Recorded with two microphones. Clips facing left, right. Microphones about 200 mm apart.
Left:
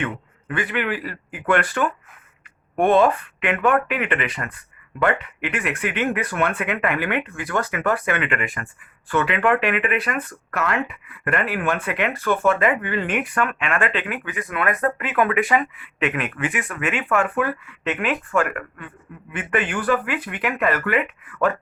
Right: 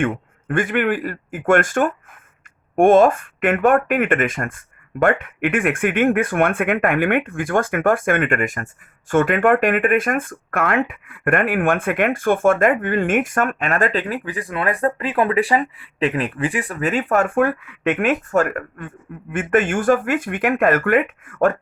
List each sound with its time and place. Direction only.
0.0 s speech: 50° right (ahead or behind)